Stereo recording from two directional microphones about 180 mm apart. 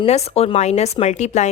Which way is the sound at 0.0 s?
35° left (ahead or behind).